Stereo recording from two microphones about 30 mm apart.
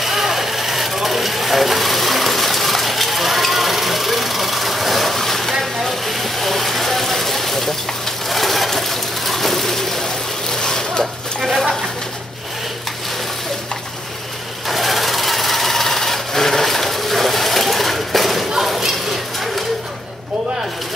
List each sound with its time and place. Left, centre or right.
0.0 s mechanisms: centre
3.4 s vehicle: centre
8.3 s sewing machine: centre
10.6 s splash: left
14.7 s sewing machine: centre
18.6 s thump: centre